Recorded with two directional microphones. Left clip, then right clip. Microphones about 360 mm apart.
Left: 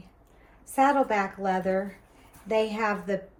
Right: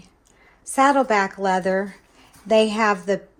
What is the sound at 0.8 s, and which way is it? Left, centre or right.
Speech, right.